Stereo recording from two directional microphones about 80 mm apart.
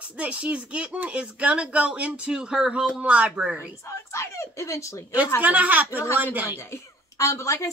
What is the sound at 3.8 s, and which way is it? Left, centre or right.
A woman's voice, left.